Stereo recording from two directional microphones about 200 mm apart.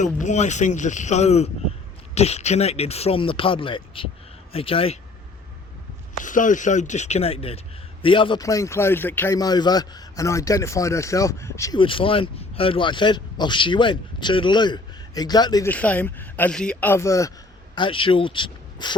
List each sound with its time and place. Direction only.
0.0 s a man's voice: 35° left (ahead or behind)
6.1 s a man's voice: 40° left (ahead or behind); by 15.7 s 20° left (ahead or behind)
15.7 s speech: 5° left (ahead or behind); by 18.9 s 25° left (ahead or behind)